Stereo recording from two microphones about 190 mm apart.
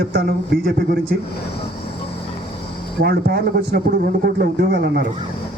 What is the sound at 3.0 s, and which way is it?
A man's voice, 60° right (ahead or behind).